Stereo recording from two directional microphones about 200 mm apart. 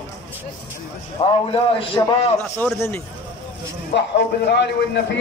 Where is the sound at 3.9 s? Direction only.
55° left (ahead or behind).